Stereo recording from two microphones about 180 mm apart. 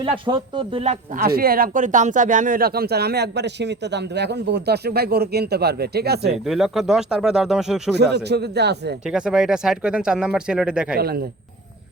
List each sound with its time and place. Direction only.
0.0 s speech: 25° right (ahead or behind)
1.1 s speech: 55° right (ahead or behind)
6.4 s speech: centre (ahead or behind)
7.9 s speech: 65° right (ahead or behind)
9.0 s speech: 5° right (ahead or behind)
10.9 s speech: 60° right (ahead or behind)